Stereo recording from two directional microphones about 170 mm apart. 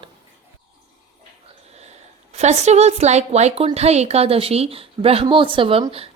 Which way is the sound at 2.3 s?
40° right (ahead or behind).